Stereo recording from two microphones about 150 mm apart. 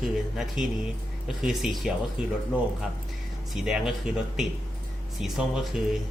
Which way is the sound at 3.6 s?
5° right (ahead or behind).